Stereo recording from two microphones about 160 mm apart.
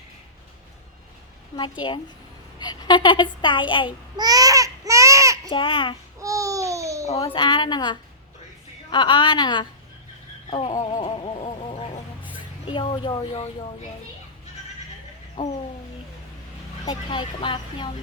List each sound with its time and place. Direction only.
2.6 s a woman's voice: 25° left (ahead or behind)
4.2 s baby cry: 25° right (ahead or behind)
5.5 s speech: 30° left (ahead or behind)
6.1 s babbling: 20° right (ahead or behind)
7.2 s a woman's voice: 30° left (ahead or behind)
11.4 s a sound: 35° left (ahead or behind)
15.4 s a woman's voice: 30° left (ahead or behind)
16.8 s a woman's voice: 25° left (ahead or behind)